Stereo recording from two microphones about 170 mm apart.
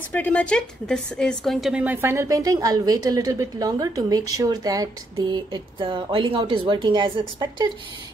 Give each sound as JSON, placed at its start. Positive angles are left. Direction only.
{"t": 0.1, "sound": "speech", "side_deg": 10}